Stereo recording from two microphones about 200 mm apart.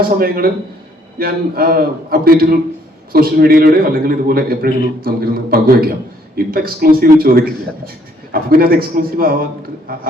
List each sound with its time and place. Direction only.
0.2 s a man's voice: 50° right (ahead or behind)